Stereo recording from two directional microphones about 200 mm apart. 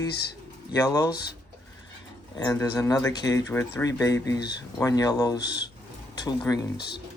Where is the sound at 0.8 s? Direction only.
15° left (ahead or behind).